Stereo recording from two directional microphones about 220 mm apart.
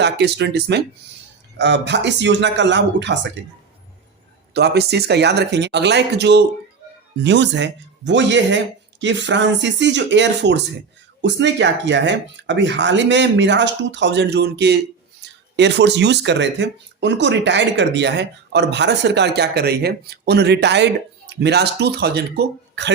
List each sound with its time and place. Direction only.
0.0 s speech: 50° right (ahead or behind)
4.5 s speech: 50° right (ahead or behind)